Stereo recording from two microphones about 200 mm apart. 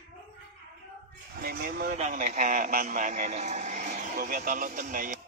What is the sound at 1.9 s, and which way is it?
A man's voice, 35° right (ahead or behind).